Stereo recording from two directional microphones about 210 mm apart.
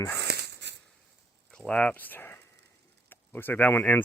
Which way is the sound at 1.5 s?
5° left (ahead or behind).